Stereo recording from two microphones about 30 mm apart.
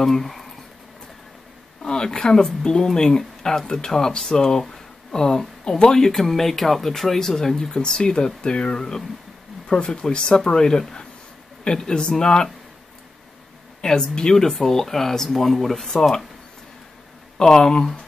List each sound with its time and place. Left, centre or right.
0.0 s speech: centre
1.8 s speech: left
9.8 s speech: left
10.1 s speech: left
13.7 s a sound: left
14.0 s speech: left
14.7 s speech: centre
17.4 s speech: centre